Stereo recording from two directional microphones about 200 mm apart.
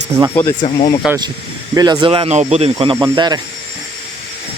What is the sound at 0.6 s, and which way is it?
Speech, 25° left (ahead or behind).